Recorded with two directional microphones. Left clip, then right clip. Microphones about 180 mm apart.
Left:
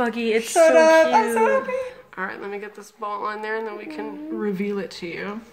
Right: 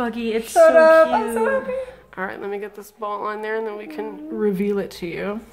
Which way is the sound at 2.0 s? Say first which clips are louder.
Right 2 dB; 25° right (ahead or behind).